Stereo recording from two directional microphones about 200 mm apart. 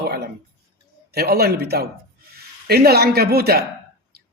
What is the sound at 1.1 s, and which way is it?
Speech, 50° right (ahead or behind).